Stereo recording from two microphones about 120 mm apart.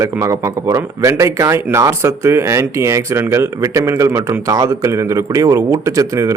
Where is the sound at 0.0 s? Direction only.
25° right (ahead or behind).